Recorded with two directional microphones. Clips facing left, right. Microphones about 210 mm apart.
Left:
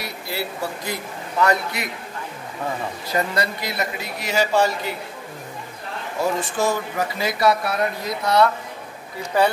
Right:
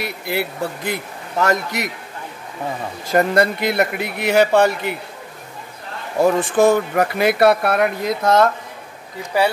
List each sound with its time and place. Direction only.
0.3 s speech: 60° right (ahead or behind)
1.4 s a man's voice: 45° right (ahead or behind)
3.1 s speech: 55° right (ahead or behind)
6.2 s speech: 55° right (ahead or behind)
9.3 s speech: 10° right (ahead or behind)